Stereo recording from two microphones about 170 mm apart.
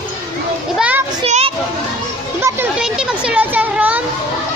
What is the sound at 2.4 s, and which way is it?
A child's voice, 15° right (ahead or behind).